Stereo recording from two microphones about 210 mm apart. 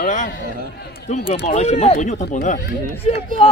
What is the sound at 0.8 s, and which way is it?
Speech, 50° left (ahead or behind).